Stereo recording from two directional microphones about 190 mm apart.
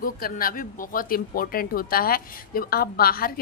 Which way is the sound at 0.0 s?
50° left (ahead or behind).